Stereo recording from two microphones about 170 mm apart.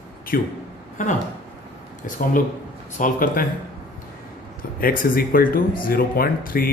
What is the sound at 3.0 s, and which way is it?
Speech, 50° left (ahead or behind).